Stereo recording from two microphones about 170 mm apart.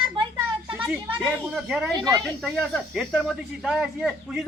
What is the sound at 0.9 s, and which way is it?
Speech, 10° right (ahead or behind).